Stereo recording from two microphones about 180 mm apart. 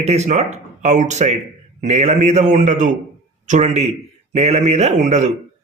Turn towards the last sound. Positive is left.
turn(degrees=-40)  # may be behind; listen again after turning